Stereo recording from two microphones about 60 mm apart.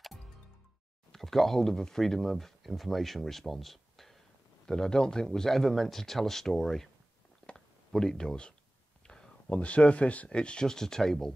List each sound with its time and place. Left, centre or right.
1.1 s speech: centre
7.4 s a sound: centre
9.6 s speech: left